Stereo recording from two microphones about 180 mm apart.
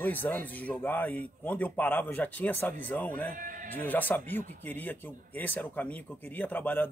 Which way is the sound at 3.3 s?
50° right (ahead or behind).